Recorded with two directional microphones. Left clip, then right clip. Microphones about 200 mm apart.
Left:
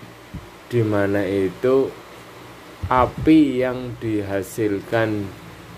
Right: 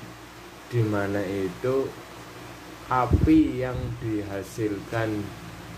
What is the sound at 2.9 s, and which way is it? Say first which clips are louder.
Speech: left 6 dB; 50° left (ahead or behind).